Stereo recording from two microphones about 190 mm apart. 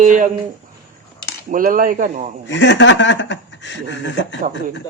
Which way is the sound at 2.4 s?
70° left (ahead or behind).